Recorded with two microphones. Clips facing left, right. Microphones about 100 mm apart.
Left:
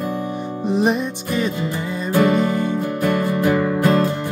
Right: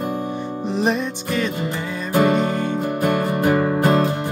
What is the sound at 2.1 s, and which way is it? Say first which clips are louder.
Music: left 1 dB; 25° right (ahead or behind).